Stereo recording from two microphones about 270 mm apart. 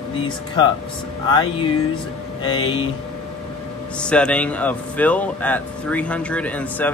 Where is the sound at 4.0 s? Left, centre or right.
Centre.